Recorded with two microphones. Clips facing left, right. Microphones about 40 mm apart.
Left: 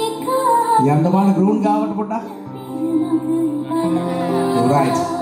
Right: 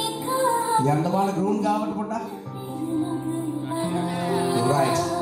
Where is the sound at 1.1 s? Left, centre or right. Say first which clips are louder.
Left 7 dB; left.